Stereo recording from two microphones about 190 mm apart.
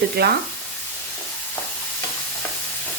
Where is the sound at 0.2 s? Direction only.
55° right (ahead or behind).